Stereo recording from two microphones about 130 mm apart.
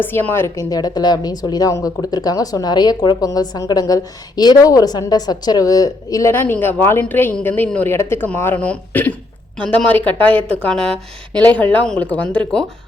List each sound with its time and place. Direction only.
0.0 s a woman's voice: 15° left (ahead or behind)